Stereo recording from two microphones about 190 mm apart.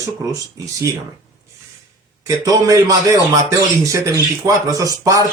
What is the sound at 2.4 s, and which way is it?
Speech, 15° right (ahead or behind).